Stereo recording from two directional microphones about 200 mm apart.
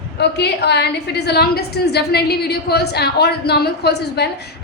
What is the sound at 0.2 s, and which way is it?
A woman's voice, 55° left (ahead or behind).